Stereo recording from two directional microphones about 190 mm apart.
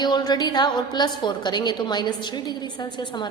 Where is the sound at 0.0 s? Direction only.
20° left (ahead or behind).